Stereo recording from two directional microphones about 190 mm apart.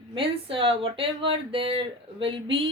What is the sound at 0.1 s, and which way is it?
Speech, 25° right (ahead or behind).